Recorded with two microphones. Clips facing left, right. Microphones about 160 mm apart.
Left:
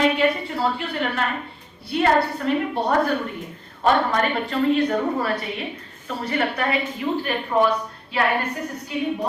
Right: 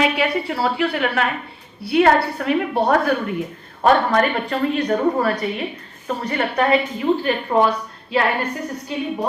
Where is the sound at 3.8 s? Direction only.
50° right (ahead or behind).